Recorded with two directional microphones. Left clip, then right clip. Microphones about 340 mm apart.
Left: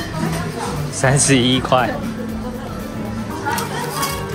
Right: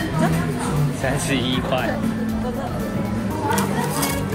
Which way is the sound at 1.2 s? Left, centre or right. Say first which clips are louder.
Left 7 dB; left.